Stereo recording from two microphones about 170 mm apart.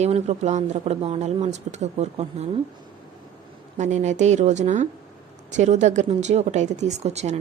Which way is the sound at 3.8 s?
45° right (ahead or behind).